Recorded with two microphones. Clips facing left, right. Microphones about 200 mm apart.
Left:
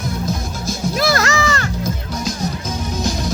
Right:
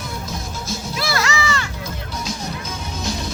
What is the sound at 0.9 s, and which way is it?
Music, 45° left (ahead or behind).